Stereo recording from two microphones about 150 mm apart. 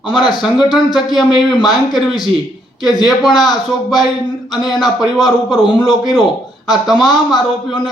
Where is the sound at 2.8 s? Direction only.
25° left (ahead or behind).